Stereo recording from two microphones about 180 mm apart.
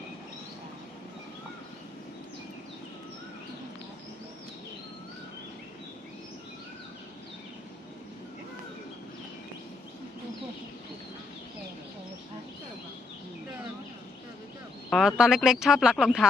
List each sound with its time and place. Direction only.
14.8 s speech: centre (ahead or behind)